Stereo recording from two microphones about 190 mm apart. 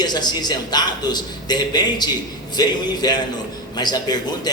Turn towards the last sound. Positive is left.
turn(degrees=20)  # may be behind; listen again after turning